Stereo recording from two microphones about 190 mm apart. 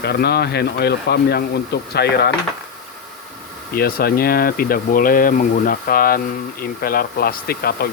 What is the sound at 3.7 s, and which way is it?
Speech, 55° left (ahead or behind).